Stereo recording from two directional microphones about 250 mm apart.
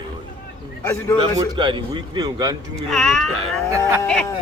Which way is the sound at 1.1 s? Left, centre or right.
Centre.